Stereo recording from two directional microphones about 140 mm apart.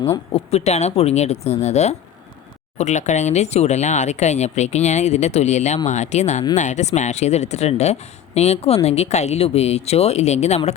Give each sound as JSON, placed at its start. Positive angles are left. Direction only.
{"t": 0.3, "sound": "speech", "side_deg": 50}